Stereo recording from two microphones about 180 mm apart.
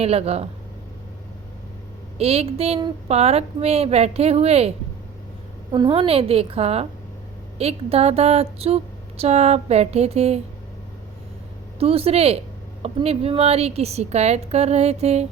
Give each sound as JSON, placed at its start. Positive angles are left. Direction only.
{"t": 0.0, "sound": "a woman's voice", "side_deg": -35}
{"t": 2.1, "sound": "a woman's voice", "side_deg": -35}
{"t": 5.7, "sound": "a woman's voice", "side_deg": -25}
{"t": 11.8, "sound": "a woman's voice", "side_deg": -35}